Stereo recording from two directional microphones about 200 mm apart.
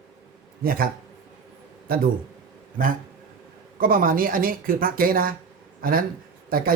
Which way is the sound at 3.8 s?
45° right (ahead or behind).